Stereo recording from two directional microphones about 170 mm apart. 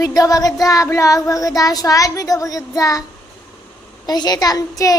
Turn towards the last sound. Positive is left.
turn(degrees=20)  # may be behind; listen again after turning